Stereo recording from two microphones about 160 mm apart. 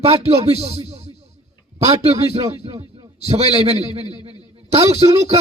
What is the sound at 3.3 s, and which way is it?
A man's voice, 40° right (ahead or behind).